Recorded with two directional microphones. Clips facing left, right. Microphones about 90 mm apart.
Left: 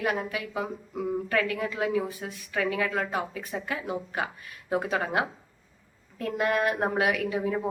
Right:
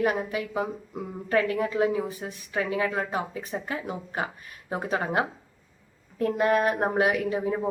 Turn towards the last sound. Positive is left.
turn(degrees=-30)  # may be behind; listen again after turning